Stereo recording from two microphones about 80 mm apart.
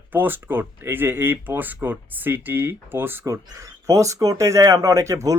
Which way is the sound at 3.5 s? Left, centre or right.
Right.